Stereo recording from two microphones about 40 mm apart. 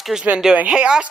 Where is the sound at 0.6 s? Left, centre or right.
Right.